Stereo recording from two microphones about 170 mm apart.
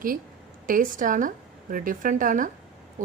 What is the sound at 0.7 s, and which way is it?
Speech, 50° right (ahead or behind).